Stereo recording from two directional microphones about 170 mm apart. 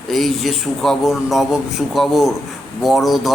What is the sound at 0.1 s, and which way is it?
Speech, centre (ahead or behind).